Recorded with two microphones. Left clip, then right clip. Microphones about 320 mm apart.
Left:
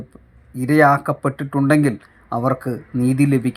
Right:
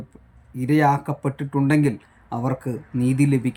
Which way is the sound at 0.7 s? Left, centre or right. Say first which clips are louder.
Left 5 dB; centre.